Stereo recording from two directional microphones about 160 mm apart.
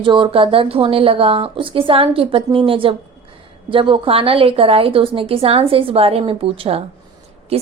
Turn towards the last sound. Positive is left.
turn(degrees=-40)  # may be behind; listen again after turning